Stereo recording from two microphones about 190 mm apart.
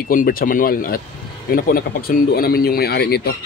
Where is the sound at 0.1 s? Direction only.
50° left (ahead or behind).